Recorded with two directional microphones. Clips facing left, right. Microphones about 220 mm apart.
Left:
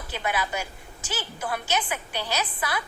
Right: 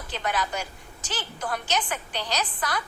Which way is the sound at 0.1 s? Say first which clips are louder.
Even; 10° left (ahead or behind).